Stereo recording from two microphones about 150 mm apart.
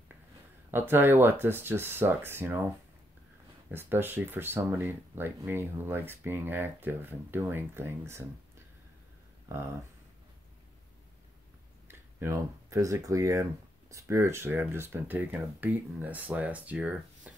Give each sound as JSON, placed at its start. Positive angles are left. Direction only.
{"t": 0.7, "sound": "speech", "side_deg": -15}
{"t": 3.7, "sound": "speech", "side_deg": -15}
{"t": 11.9, "sound": "speech", "side_deg": -15}